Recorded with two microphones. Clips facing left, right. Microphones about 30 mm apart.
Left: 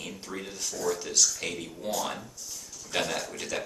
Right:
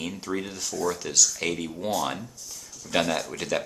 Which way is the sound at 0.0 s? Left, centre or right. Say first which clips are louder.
Right 7 dB; right.